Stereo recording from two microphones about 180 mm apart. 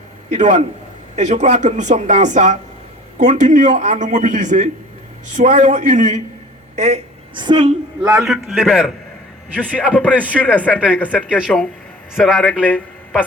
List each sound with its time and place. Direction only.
0.3 s a man's voice: 40° right (ahead or behind)
7.3 s a man's voice: 25° right (ahead or behind)
8.2 s a man's voice: centre (ahead or behind)